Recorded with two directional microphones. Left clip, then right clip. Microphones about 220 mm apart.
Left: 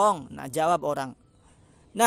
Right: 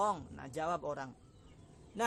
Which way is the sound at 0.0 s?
40° left (ahead or behind).